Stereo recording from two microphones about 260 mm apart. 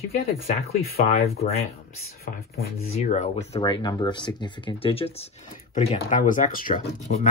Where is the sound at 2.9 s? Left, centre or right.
Left.